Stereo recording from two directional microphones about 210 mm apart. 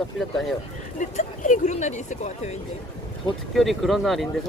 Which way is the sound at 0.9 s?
35° left (ahead or behind).